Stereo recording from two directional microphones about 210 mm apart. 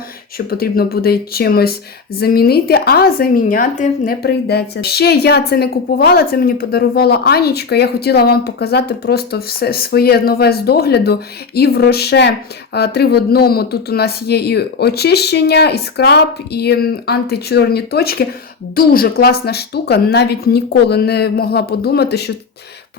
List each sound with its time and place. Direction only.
0.3 s a woman's voice: 45° left (ahead or behind)